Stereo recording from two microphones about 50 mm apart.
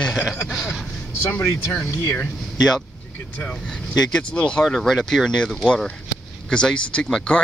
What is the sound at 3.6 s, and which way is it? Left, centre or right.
Speech, centre.